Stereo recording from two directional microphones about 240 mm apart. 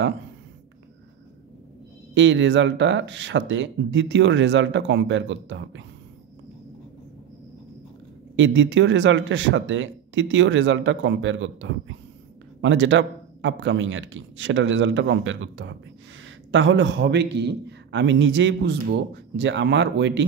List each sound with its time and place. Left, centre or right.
2.1 s speech: right
8.4 s speech: right